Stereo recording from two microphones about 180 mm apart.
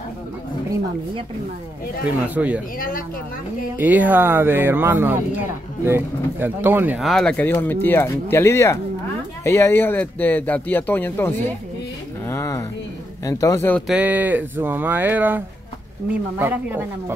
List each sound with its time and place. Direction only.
2.2 s speech: 10° right (ahead or behind)
3.7 s speech: 10° right (ahead or behind)
7.1 s speech: 5° left (ahead or behind)
12.3 s a sound: 15° left (ahead or behind)
13.2 s speech: 20° left (ahead or behind)
13.8 s speech: 10° right (ahead or behind)